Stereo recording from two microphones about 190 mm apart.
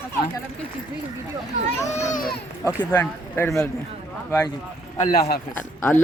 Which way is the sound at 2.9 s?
10° left (ahead or behind).